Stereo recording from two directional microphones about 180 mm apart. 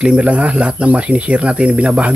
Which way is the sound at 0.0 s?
5° right (ahead or behind).